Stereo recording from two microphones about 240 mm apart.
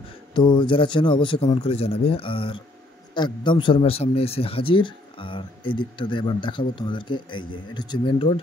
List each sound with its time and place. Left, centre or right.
0.3 s a man's voice: centre